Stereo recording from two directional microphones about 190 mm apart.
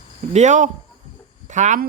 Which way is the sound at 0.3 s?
40° right (ahead or behind).